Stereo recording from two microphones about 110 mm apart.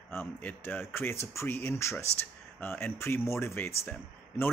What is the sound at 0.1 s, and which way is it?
Speech, 15° left (ahead or behind).